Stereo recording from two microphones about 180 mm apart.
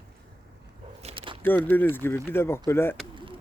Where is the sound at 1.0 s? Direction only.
30° right (ahead or behind).